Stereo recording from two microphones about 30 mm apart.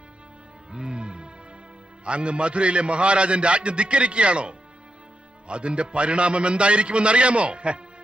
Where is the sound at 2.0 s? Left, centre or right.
Right.